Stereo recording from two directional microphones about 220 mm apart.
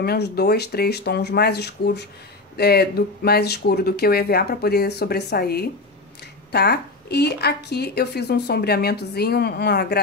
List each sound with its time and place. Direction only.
0.0 s a woman's voice: 50° left (ahead or behind)